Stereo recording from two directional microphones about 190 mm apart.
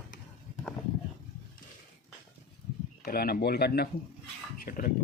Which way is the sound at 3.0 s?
50° left (ahead or behind).